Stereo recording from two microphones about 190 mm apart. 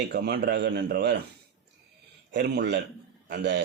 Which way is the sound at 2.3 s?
60° right (ahead or behind).